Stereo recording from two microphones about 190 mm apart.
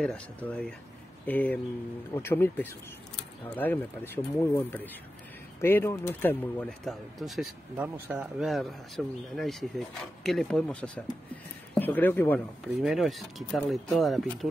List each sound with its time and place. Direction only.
0.0 s speech: 5° left (ahead or behind)
12.8 s speech: centre (ahead or behind)